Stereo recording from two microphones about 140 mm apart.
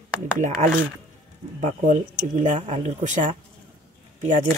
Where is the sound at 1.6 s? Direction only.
55° right (ahead or behind).